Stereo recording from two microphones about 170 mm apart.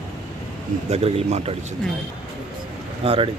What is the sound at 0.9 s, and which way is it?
Speech, 35° right (ahead or behind).